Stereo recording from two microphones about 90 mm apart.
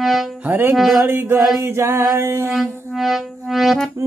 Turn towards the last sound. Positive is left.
turn(degrees=0)  # may be behind; listen again after turning